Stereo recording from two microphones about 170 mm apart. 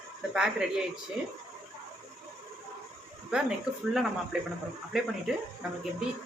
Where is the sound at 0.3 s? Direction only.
5° right (ahead or behind).